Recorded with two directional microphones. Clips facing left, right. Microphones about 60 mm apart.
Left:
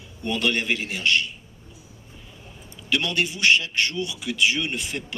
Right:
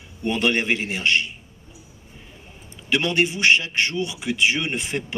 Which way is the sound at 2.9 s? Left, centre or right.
Right.